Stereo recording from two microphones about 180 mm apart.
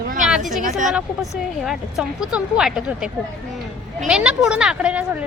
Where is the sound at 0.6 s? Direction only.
45° right (ahead or behind).